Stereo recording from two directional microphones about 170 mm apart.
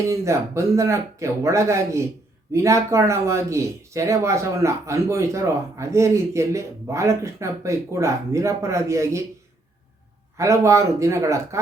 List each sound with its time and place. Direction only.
0.0 s speech: 15° right (ahead or behind)
10.3 s speech: 15° right (ahead or behind)